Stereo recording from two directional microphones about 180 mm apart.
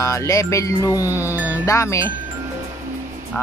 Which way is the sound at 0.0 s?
15° left (ahead or behind).